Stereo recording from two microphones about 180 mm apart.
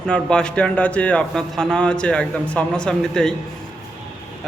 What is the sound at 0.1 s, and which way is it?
A man's voice, 5° left (ahead or behind).